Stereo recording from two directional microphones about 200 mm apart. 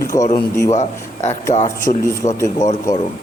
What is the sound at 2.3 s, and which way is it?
Speech, 15° left (ahead or behind).